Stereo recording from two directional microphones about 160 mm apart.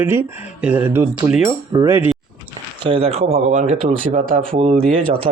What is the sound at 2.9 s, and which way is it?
Speech, 40° right (ahead or behind).